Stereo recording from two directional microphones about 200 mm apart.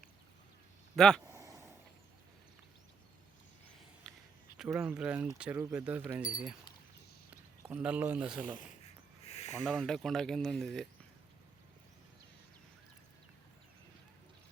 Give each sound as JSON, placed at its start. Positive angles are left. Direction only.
{"t": 0.9, "sound": "speech", "side_deg": 5}
{"t": 1.3, "sound": "a sound", "side_deg": -15}
{"t": 4.1, "sound": "a sound", "side_deg": 5}
{"t": 4.8, "sound": "speech", "side_deg": -5}
{"t": 7.6, "sound": "speech", "side_deg": -5}
{"t": 9.2, "sound": "snake", "side_deg": 30}
{"t": 9.6, "sound": "speech", "side_deg": 0}